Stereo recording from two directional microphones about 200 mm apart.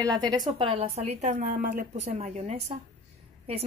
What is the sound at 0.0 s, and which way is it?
A woman's voice, 20° right (ahead or behind).